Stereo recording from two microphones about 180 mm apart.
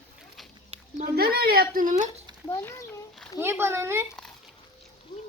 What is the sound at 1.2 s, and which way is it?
Speech, 60° right (ahead or behind).